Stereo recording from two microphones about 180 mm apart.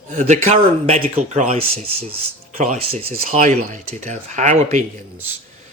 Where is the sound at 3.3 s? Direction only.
45° right (ahead or behind).